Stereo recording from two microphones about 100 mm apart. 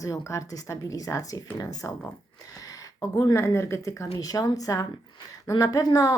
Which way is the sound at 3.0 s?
35° left (ahead or behind).